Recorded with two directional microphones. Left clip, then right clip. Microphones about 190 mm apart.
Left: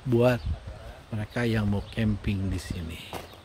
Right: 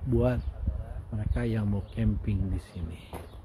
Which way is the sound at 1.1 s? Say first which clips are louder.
Left 5 dB; 20° left (ahead or behind).